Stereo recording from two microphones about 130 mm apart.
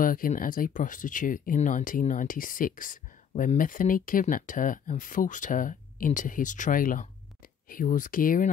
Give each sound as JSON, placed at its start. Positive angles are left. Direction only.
{"t": 0.0, "sound": "speech", "side_deg": 90}